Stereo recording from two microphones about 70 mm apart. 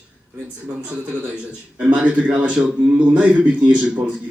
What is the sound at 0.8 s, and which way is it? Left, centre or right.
A man's voice, centre.